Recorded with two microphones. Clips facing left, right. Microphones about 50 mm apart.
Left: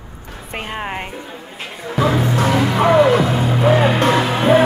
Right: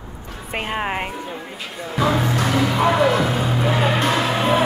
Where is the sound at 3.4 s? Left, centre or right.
Left.